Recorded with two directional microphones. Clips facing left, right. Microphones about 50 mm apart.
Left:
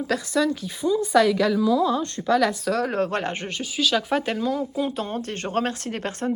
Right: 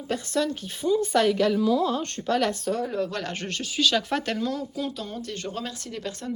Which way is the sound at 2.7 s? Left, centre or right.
Left.